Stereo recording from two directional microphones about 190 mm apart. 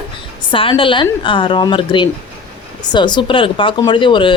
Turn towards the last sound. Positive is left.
turn(degrees=25)  # may be behind; listen again after turning